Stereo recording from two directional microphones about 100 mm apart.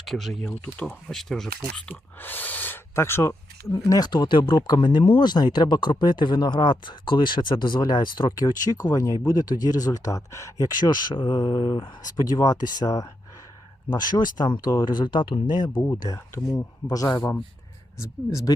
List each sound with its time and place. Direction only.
0.0 s speech: centre (ahead or behind)
1.9 s speech: 20° left (ahead or behind)
3.8 s speech: 40° left (ahead or behind)
15.9 s speech: 30° left (ahead or behind)
18.0 s speech: 30° left (ahead or behind)